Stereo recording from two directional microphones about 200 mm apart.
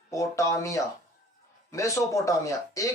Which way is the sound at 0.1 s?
15° left (ahead or behind).